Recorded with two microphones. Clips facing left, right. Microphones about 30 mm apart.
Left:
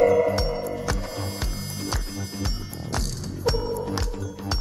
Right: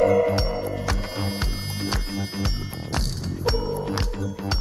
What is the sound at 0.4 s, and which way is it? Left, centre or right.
Music, right.